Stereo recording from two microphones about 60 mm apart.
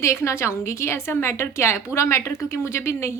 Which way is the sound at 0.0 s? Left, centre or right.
Left.